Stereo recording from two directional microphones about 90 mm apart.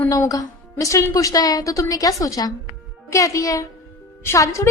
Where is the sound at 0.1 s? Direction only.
40° left (ahead or behind).